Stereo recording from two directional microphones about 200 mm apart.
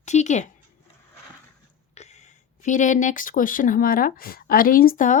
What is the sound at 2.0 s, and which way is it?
Speech, 35° left (ahead or behind).